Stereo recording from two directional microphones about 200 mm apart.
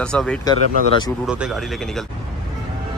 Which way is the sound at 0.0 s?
5° left (ahead or behind).